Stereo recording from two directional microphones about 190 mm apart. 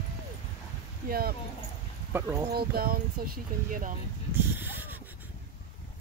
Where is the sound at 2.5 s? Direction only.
55° right (ahead or behind).